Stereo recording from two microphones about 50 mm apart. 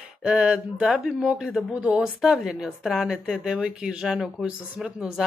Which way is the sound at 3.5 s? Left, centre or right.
Centre.